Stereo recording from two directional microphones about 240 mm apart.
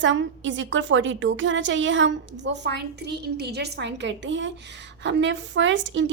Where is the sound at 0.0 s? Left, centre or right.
Right.